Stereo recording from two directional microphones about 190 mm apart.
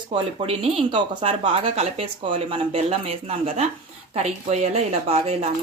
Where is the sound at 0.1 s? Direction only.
30° right (ahead or behind).